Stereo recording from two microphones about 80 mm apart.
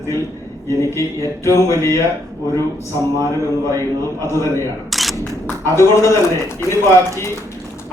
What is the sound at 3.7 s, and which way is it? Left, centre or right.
Speech, left.